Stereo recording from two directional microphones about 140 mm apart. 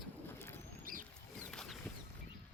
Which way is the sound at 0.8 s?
80° right.